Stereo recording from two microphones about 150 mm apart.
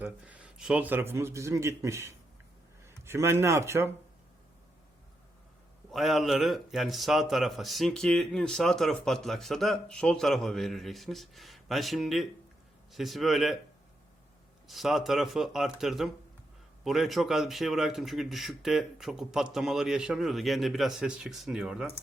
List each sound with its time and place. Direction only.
0.0 s a man's voice: 10° right (ahead or behind)
5.9 s a man's voice: centre (ahead or behind)
14.7 s a man's voice: centre (ahead or behind)